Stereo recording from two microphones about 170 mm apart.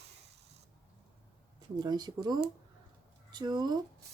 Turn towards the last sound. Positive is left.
turn(degrees=-25)  # may be behind; listen again after turning